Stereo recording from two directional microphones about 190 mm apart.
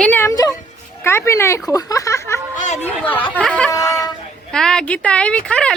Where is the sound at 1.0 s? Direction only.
15° left (ahead or behind).